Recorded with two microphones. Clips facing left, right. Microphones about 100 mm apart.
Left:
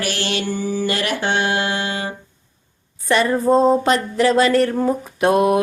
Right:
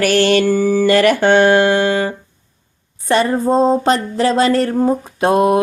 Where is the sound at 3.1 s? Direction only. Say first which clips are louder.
Right 1 dB; 30° right (ahead or behind).